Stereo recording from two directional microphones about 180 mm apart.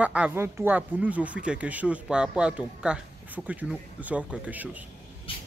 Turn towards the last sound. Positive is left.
turn(degrees=30)  # may be behind; listen again after turning